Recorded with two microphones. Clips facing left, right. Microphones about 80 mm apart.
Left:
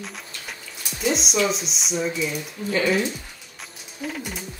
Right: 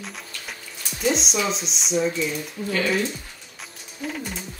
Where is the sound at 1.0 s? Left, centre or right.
Centre.